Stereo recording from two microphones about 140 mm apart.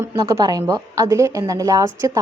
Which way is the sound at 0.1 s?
25° right (ahead or behind).